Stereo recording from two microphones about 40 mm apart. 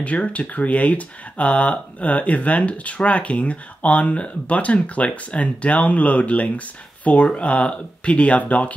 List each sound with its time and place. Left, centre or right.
0.0 s speech: left